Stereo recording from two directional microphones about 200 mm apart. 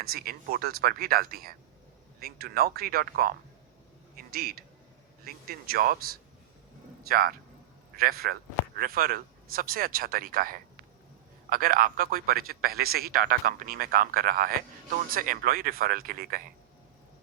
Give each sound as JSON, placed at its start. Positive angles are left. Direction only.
{"t": 0.0, "sound": "a man's voice", "side_deg": -50}
{"t": 7.1, "sound": "a man's voice", "side_deg": -45}